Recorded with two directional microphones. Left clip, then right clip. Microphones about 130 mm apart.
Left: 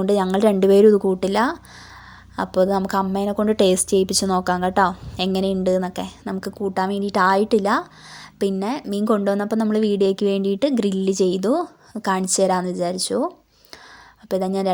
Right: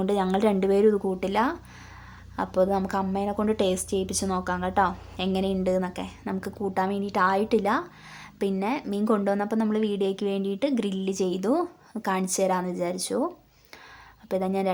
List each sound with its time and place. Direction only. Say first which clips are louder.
0.0 s a woman's voice: left 6 dB; 35° left (ahead or behind)